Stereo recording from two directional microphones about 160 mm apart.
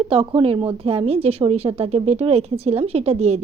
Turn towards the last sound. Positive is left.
turn(degrees=-40)  # may be behind; listen again after turning